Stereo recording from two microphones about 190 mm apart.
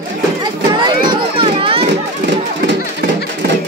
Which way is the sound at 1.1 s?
25° right (ahead or behind).